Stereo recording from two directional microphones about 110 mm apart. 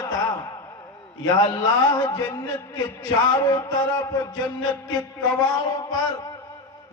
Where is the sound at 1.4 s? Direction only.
35° left (ahead or behind).